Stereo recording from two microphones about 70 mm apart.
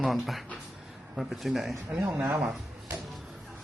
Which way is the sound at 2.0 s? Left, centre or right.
Right.